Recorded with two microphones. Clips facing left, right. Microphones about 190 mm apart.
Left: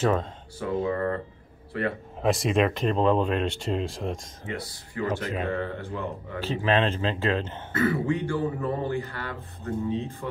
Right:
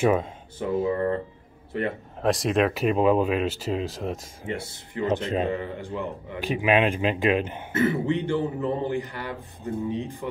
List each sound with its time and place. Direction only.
0.0 s speech: 10° right (ahead or behind)
0.8 s speech: 25° right (ahead or behind)
2.2 s speech: centre (ahead or behind)
4.5 s speech: 25° right (ahead or behind)
5.5 s speech: 15° right (ahead or behind)